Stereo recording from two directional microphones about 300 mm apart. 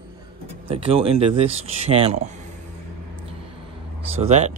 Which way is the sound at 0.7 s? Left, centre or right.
Centre.